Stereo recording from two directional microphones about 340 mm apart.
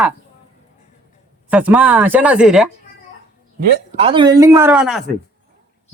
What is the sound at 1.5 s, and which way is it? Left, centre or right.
Speech, centre.